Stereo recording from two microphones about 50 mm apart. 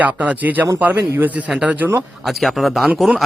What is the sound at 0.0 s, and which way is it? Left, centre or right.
Speech, right.